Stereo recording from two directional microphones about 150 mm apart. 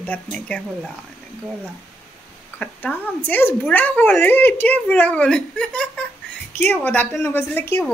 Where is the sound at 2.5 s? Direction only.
10° left (ahead or behind).